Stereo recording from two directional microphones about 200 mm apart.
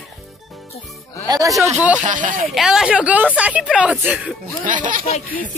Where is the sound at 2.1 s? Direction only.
40° right (ahead or behind).